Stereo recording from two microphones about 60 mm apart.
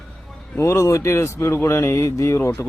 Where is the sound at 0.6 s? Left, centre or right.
Left.